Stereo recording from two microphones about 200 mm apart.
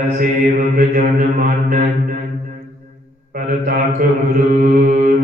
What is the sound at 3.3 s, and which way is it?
Mantra, 45° right (ahead or behind).